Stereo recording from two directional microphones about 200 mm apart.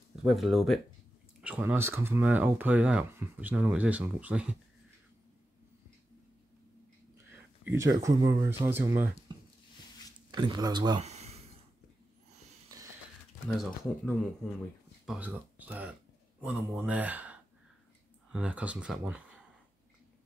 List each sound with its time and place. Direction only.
0.2 s speech: centre (ahead or behind)
7.6 s speech: 15° right (ahead or behind)
10.3 s speech: 20° right (ahead or behind)
11.0 s a sound: 35° right (ahead or behind)
13.5 s speech: 5° left (ahead or behind)
15.0 s speech: 5° right (ahead or behind)